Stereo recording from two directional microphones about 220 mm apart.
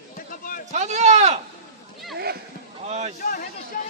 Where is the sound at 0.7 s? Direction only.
30° right (ahead or behind).